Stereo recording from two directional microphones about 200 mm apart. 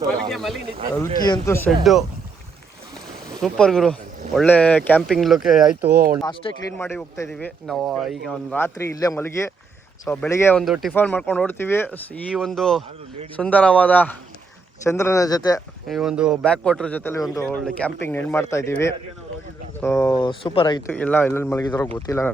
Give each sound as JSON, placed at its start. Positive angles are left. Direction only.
{"t": 0.3, "sound": "speech", "side_deg": 0}
{"t": 0.9, "sound": "a man's voice", "side_deg": 20}
{"t": 1.8, "sound": "speech", "side_deg": 0}
{"t": 3.4, "sound": "a man's voice", "side_deg": 0}
{"t": 6.2, "sound": "speech", "side_deg": 25}
{"t": 6.7, "sound": "a man's voice", "side_deg": 10}
{"t": 10.6, "sound": "a man's voice", "side_deg": 0}
{"t": 15.9, "sound": "a man's voice", "side_deg": 0}
{"t": 19.8, "sound": "speech", "side_deg": 15}
{"t": 20.9, "sound": "a man's voice", "side_deg": 10}